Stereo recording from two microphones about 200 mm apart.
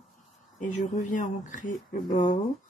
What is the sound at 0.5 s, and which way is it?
Speech, 40° left (ahead or behind).